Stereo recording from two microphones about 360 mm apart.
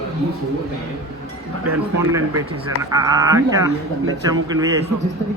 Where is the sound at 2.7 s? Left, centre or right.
Centre.